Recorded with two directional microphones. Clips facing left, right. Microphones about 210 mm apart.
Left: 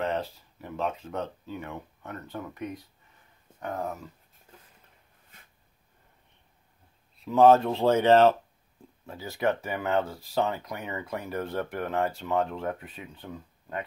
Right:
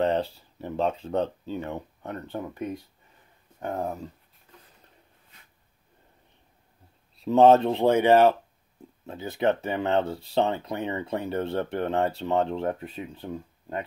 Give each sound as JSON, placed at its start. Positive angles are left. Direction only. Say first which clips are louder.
{"t": 0.0, "sound": "speech", "louder": "right 5 dB", "side_deg": -30}
{"t": 7.2, "sound": "speech", "louder": "right 2 dB", "side_deg": -30}